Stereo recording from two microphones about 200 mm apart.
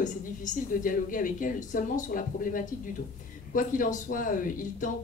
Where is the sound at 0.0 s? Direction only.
40° left (ahead or behind).